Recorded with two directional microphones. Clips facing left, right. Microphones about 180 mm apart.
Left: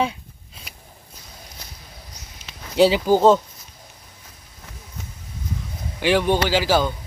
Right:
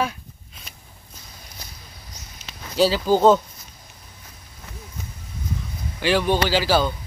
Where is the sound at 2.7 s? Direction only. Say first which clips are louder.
Left 3 dB; 20° left (ahead or behind).